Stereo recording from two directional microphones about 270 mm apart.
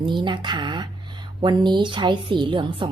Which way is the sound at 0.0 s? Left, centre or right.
Centre.